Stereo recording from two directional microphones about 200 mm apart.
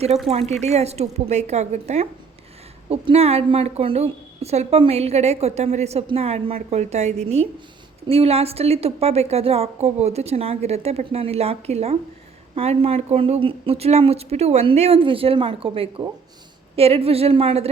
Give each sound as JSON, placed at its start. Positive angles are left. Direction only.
{"t": 0.3, "sound": "a woman's voice", "side_deg": -30}